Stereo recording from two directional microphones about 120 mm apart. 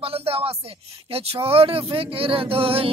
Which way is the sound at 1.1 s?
55° right (ahead or behind).